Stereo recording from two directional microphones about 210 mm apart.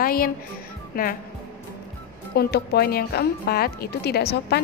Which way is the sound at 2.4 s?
50° left (ahead or behind).